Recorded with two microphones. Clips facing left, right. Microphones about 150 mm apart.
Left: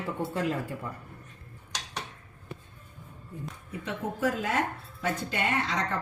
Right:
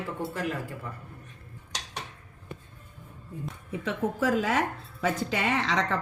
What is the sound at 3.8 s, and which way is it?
A woman's voice, 90° right.